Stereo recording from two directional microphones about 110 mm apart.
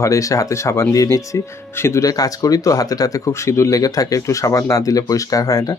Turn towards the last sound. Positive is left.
turn(degrees=35)  # may be behind; listen again after turning